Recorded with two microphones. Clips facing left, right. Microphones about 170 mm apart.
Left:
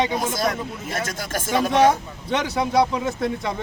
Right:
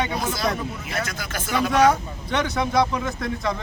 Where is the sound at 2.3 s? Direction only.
25° left (ahead or behind).